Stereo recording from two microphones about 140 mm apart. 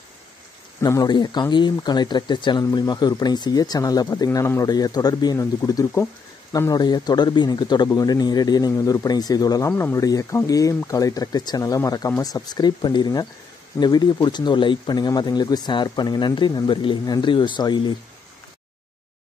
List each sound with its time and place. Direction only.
0.7 s speech: 25° left (ahead or behind)